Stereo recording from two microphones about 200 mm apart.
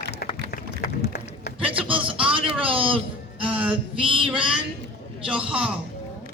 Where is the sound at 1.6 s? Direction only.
25° right (ahead or behind).